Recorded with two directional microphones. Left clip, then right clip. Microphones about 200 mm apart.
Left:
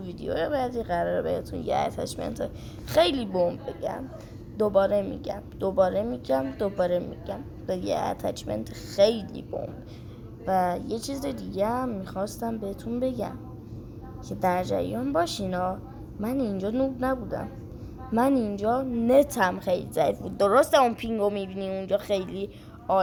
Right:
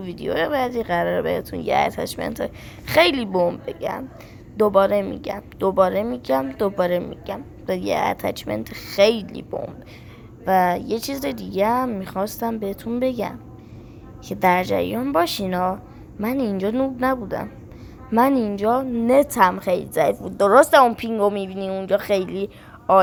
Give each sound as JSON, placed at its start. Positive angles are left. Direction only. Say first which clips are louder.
{"t": 0.0, "sound": "a woman's voice", "louder": "right 6 dB", "side_deg": -25}